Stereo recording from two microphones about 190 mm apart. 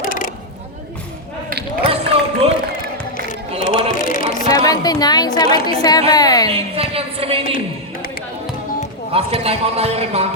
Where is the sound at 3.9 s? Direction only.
45° left (ahead or behind).